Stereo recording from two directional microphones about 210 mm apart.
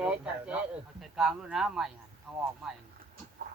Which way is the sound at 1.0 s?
Centre (ahead or behind).